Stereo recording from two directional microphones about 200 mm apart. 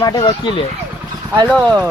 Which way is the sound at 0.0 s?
20° left (ahead or behind).